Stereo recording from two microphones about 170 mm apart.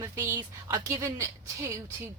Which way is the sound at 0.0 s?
20° right (ahead or behind).